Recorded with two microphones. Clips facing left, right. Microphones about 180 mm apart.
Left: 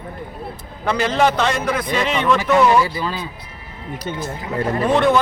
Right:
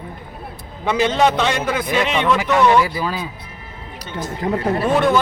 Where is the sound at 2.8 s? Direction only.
15° right (ahead or behind).